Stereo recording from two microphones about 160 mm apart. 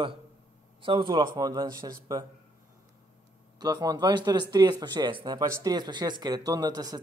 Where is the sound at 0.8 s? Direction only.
30° right (ahead or behind).